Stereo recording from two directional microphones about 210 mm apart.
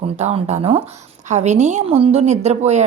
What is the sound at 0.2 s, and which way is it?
A woman's voice, 30° right (ahead or behind).